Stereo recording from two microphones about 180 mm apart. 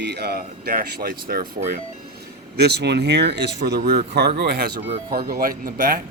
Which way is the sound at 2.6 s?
70° right (ahead or behind).